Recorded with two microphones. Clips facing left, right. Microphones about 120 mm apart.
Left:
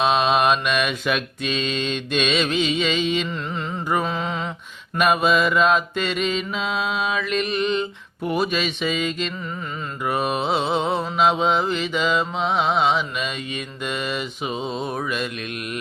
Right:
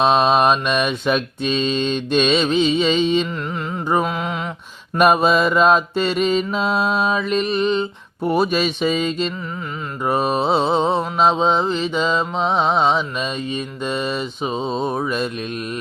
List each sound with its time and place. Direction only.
0.0 s mantra: centre (ahead or behind)
0.4 s mantra: 35° right (ahead or behind)
3.2 s music: 10° right (ahead or behind)
4.9 s mantra: 40° right (ahead or behind)